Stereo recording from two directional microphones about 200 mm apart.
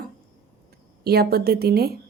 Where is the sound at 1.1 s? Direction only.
50° right (ahead or behind).